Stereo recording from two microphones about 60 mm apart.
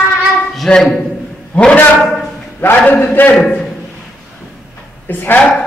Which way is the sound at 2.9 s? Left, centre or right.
Left.